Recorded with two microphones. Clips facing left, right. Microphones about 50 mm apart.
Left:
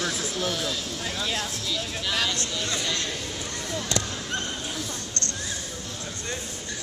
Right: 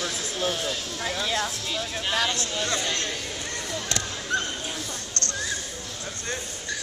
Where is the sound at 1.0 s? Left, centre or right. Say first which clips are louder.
Right 4 dB; right.